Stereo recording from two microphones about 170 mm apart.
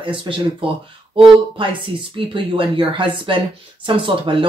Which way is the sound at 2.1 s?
30° right (ahead or behind).